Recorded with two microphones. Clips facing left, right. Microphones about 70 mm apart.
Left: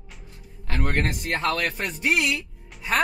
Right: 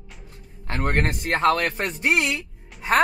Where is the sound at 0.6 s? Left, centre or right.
Right.